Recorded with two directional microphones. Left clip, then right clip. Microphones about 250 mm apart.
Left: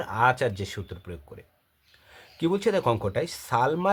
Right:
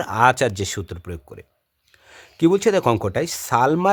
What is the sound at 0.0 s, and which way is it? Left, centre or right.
Speech, right.